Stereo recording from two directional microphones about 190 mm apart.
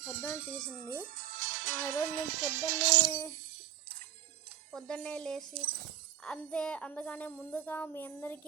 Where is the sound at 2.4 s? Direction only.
65° right (ahead or behind).